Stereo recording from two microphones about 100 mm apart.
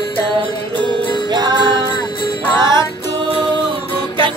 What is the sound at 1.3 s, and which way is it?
Music, 45° right (ahead or behind).